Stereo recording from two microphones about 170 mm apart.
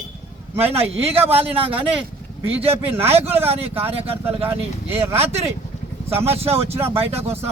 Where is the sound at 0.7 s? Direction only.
35° right (ahead or behind).